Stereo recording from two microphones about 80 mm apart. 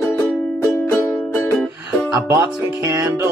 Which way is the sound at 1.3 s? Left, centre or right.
Left.